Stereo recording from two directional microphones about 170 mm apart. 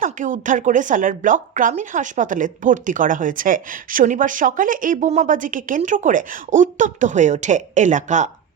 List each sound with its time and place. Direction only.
0.0 s speech: 50° right (ahead or behind)